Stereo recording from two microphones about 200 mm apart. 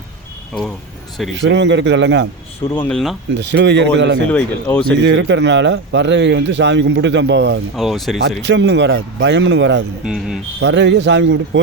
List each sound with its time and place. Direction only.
1.4 s speech: 60° right (ahead or behind)
2.7 s speech: 5° left (ahead or behind)
3.3 s speech: 60° right (ahead or behind)
4.3 s speech: 5° left (ahead or behind)
5.0 s speech: 60° right (ahead or behind)
7.8 s speech: centre (ahead or behind)
8.4 s speech: 65° right (ahead or behind)
10.1 s speech: 5° right (ahead or behind)
10.6 s speech: 60° right (ahead or behind)